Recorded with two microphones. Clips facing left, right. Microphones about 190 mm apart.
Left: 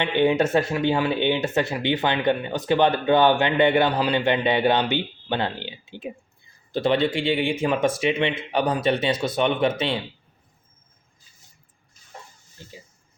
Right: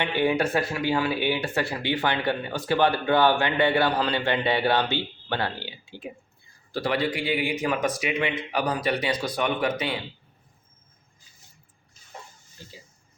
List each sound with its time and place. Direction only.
0.0 s speech: 20° left (ahead or behind)